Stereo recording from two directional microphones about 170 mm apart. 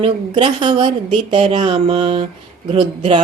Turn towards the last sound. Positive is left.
turn(degrees=-30)  # may be behind; listen again after turning